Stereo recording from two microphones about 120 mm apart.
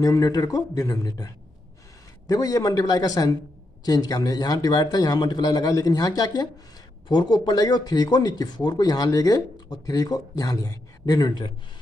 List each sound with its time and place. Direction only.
0.0 s speech: 30° left (ahead or behind)